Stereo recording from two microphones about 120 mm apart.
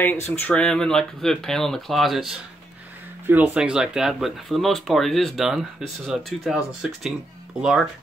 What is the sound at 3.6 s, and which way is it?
Speech, 5° right (ahead or behind).